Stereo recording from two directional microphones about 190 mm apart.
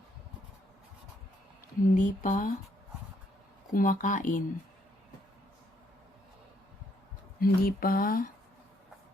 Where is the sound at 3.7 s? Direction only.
45° left (ahead or behind).